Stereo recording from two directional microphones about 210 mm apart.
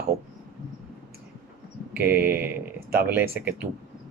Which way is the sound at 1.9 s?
10° right (ahead or behind).